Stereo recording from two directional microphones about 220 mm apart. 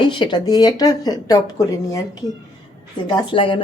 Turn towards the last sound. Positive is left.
turn(degrees=25)  # may be behind; listen again after turning